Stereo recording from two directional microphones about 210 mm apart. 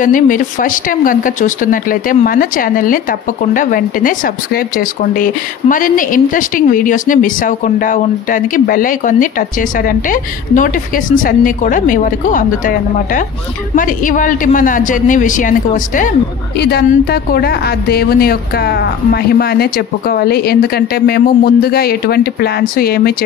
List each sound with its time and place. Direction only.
0.0 s a man's voice: 40° left (ahead or behind)